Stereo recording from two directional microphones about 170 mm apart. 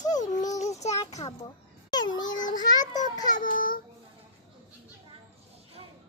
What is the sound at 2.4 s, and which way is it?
Speech, 50° left (ahead or behind).